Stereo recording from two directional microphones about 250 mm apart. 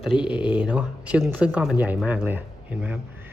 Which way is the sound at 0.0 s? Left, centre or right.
Centre.